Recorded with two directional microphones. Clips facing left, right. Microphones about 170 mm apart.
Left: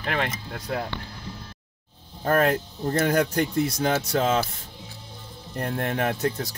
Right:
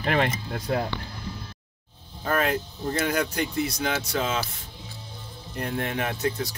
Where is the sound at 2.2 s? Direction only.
45° left (ahead or behind).